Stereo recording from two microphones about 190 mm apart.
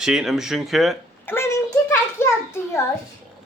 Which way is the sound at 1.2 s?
15° left (ahead or behind).